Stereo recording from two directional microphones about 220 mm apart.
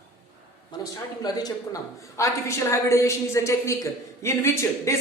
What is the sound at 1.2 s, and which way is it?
Speech, 20° left (ahead or behind).